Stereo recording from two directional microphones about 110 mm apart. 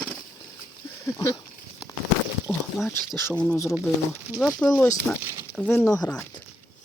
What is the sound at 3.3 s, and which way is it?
Speech, 10° left (ahead or behind).